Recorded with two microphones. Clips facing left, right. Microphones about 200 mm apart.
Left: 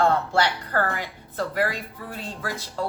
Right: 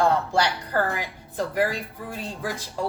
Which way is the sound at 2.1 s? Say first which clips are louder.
Right 1 dB; 15° right (ahead or behind).